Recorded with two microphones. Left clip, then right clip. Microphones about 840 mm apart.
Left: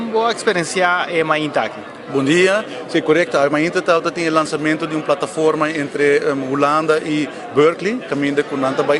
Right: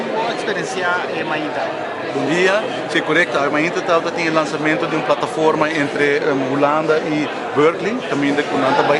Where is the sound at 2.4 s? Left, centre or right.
Left.